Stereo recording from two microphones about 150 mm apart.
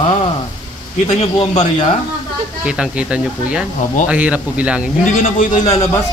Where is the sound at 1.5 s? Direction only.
50° left (ahead or behind).